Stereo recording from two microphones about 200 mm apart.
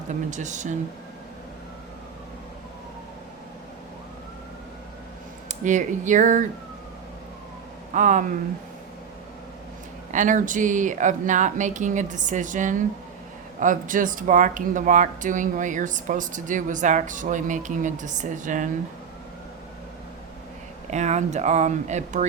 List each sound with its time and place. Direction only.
0.1 s speech: 35° right (ahead or behind)
5.5 s speech: 40° right (ahead or behind)
7.9 s speech: 40° right (ahead or behind)
10.1 s speech: 40° right (ahead or behind)
20.9 s speech: 35° right (ahead or behind)